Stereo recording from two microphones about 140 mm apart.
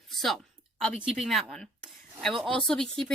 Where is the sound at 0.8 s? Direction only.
Centre (ahead or behind).